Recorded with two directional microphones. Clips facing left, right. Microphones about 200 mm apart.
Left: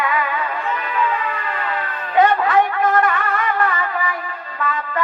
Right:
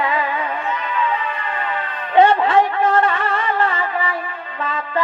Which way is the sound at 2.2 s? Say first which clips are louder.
Right 2 dB; 30° right (ahead or behind).